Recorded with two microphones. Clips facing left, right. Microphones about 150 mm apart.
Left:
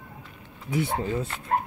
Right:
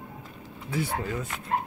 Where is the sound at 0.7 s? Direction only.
20° left (ahead or behind).